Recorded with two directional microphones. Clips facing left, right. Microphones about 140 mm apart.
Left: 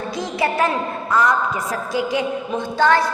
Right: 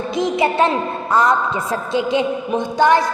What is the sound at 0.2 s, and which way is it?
A woman's voice, 20° right (ahead or behind).